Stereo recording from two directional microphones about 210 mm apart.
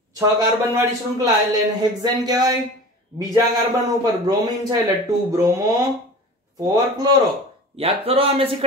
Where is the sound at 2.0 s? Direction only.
20° right (ahead or behind).